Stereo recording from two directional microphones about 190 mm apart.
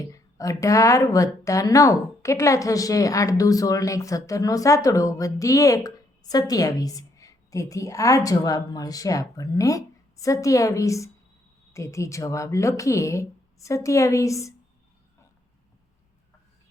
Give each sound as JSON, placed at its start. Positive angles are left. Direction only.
{"t": 0.0, "sound": "a woman's voice", "side_deg": 15}